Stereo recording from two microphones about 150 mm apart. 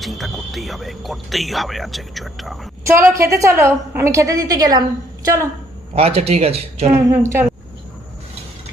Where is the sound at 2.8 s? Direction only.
20° right (ahead or behind).